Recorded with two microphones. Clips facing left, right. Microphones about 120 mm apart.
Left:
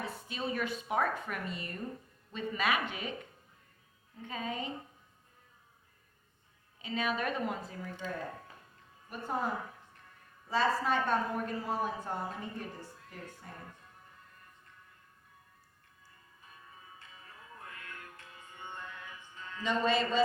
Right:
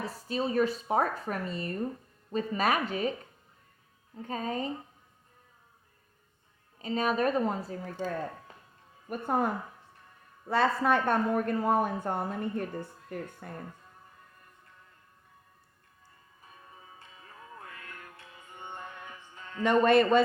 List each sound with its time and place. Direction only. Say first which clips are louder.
0.0 s speech: right 6 dB; 35° right (ahead or behind)
4.2 s speech: right 5 dB; 40° right (ahead or behind)
6.7 s speech: right 6 dB; 40° right (ahead or behind)
9.0 s speech: right 6 dB; 55° right (ahead or behind)
19.6 s speech: right 8 dB; 60° right (ahead or behind)